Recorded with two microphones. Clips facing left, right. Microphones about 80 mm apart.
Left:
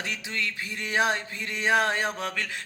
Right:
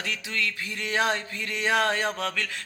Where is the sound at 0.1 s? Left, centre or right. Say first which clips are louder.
Right 1 dB; left.